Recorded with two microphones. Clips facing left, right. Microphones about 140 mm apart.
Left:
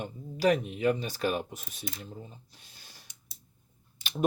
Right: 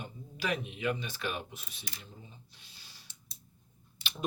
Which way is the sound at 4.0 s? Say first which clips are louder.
Left 8 dB; 45° left (ahead or behind).